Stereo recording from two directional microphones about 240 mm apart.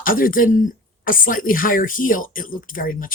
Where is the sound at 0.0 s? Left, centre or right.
Left.